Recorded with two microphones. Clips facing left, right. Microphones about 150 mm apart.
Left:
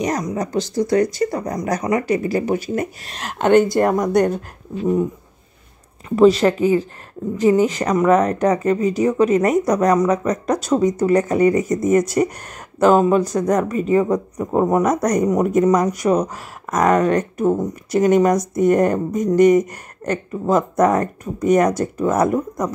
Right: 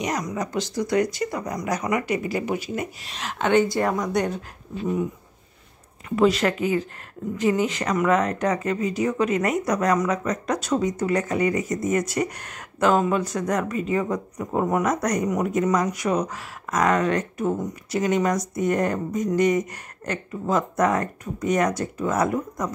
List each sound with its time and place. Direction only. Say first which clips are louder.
0.0 s speech: left 5 dB; 30° left (ahead or behind); by 4.4 s 50° left (ahead or behind)
6.0 s speech: left 7 dB; 30° left (ahead or behind)